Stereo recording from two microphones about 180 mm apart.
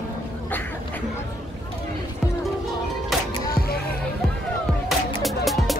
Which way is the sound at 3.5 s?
55° left (ahead or behind).